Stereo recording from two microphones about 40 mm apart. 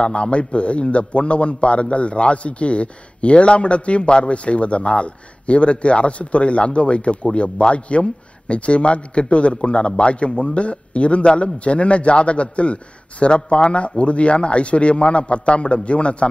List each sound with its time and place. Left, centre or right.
0.0 s a man's voice: left